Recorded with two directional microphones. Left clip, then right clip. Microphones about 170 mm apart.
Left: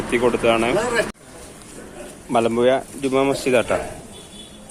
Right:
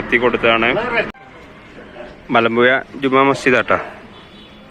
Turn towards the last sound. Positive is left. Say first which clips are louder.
# right 4 dB
turn(degrees=5)  # may be behind; listen again after turning